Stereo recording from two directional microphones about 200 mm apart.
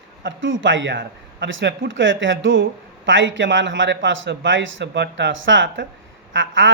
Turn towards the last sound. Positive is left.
turn(degrees=-70)  # may be behind; listen again after turning